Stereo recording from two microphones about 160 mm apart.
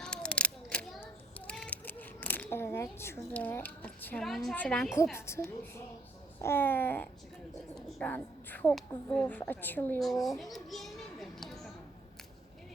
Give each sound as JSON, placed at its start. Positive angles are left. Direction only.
{"t": 0.0, "sound": "a sound", "side_deg": 5}
{"t": 3.2, "sound": "a woman's voice", "side_deg": 10}
{"t": 6.4, "sound": "a woman's voice", "side_deg": 15}
{"t": 7.8, "sound": "a woman's voice", "side_deg": 0}
{"t": 10.0, "sound": "children playing", "side_deg": 0}